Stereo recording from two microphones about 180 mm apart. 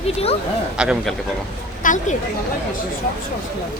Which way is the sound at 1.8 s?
45° left (ahead or behind).